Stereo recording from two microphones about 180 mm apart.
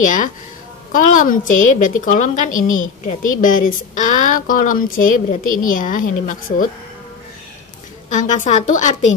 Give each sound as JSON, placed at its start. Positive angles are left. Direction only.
{"t": 0.9, "sound": "a woman's voice", "side_deg": 45}
{"t": 8.1, "sound": "a woman's voice", "side_deg": 45}